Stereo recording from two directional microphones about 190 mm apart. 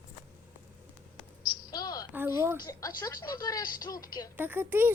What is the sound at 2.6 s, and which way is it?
Speech, 20° left (ahead or behind).